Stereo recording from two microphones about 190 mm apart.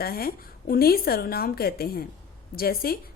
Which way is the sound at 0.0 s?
50° left (ahead or behind).